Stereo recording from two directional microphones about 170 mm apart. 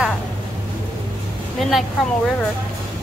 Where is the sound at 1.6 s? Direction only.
Centre (ahead or behind).